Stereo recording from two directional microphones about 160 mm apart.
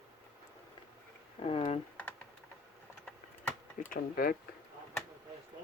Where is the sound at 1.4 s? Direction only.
40° left (ahead or behind).